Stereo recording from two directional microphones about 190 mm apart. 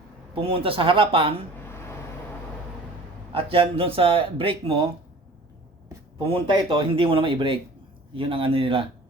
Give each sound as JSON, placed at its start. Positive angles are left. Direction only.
{"t": 0.3, "sound": "speech", "side_deg": -30}
{"t": 3.3, "sound": "speech", "side_deg": -30}
{"t": 5.9, "sound": "speech", "side_deg": -25}